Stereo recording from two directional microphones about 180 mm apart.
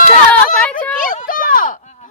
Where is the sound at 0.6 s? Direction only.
10° left (ahead or behind).